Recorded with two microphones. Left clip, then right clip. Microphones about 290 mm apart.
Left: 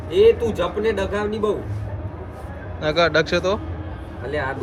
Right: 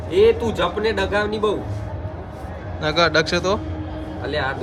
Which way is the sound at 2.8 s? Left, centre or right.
Centre.